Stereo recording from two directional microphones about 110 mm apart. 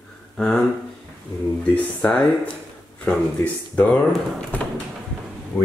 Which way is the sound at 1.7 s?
10° left (ahead or behind).